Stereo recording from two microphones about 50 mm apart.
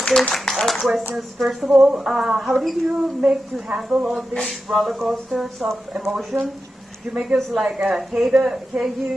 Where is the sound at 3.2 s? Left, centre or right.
Right.